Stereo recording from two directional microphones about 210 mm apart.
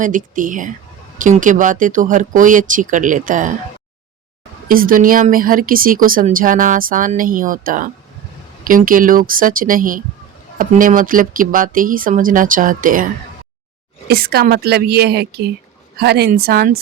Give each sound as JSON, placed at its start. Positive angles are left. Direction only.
{"t": 0.0, "sound": "speech", "side_deg": -40}
{"t": 4.7, "sound": "speech", "side_deg": -40}
{"t": 14.1, "sound": "speech", "side_deg": -45}